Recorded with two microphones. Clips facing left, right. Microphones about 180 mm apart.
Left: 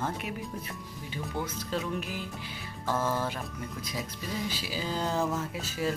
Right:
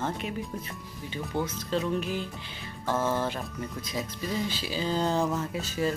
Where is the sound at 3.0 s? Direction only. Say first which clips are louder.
Right 3 dB; 25° right (ahead or behind).